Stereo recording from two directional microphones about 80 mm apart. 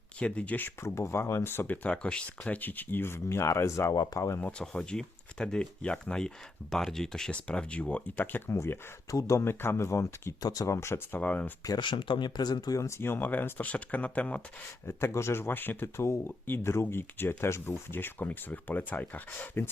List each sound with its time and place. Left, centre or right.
0.2 s speech: centre
0.8 s speech: left
3.9 s speech: left
4.4 s speech: centre
4.6 s speech: centre
8.4 s speech: left
10.4 s speech: left
10.8 s speech: left
11.2 s speech: centre
11.8 s speech: left
12.8 s speech: left; by 14.4 s centre
14.8 s speech: left